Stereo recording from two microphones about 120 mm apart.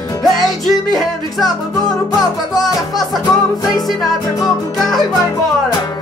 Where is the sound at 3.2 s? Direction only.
30° left (ahead or behind).